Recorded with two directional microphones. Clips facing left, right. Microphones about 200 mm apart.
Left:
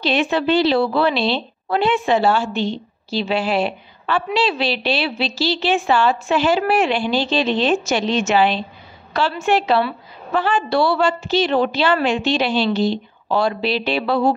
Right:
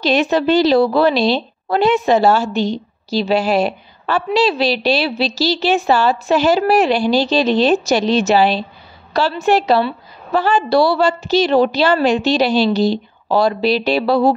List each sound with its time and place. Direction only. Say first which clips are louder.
0.0 s a woman's voice: right 4 dB; 40° right (ahead or behind)